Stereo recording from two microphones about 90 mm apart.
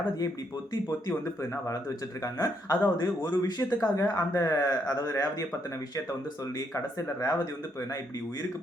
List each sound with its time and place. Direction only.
2.2 s a man's voice: 40° left (ahead or behind)
6.7 s speech: 35° left (ahead or behind)